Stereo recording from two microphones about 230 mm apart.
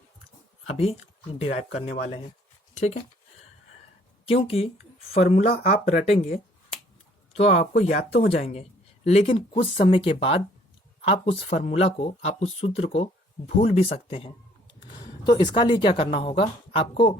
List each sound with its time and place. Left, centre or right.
0.7 s speech: left
4.3 s speech: left
8.3 s speech: left